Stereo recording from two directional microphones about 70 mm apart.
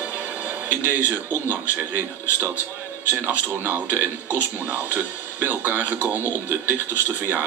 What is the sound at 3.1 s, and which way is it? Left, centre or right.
Speech, right.